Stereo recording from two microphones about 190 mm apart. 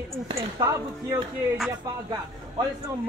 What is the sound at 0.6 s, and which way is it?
Speech, 15° right (ahead or behind).